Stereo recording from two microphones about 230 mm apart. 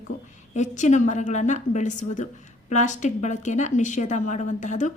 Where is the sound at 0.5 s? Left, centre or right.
Left.